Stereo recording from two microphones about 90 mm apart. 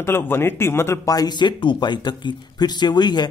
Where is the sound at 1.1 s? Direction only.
50° left (ahead or behind).